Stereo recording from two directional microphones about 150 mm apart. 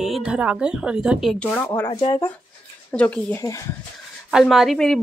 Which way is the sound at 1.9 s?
35° left (ahead or behind).